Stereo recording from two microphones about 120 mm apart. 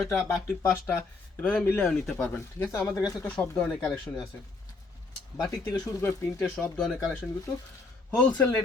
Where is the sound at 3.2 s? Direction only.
10° left (ahead or behind).